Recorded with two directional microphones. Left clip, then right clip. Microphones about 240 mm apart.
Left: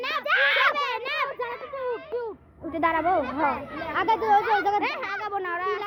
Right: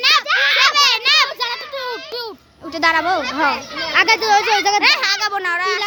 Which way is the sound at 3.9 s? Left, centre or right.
Right.